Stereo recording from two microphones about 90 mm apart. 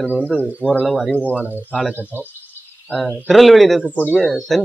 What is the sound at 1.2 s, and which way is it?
Speech, 20° left (ahead or behind).